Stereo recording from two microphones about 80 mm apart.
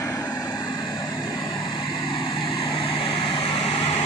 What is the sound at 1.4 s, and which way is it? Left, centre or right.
Vehicle, left.